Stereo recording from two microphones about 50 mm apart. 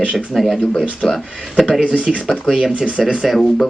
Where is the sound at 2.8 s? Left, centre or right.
Centre.